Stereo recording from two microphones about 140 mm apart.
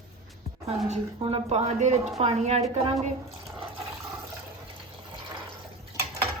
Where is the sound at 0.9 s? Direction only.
50° right (ahead or behind).